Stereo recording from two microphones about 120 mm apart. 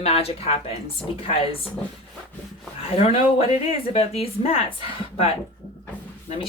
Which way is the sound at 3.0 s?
55° left (ahead or behind).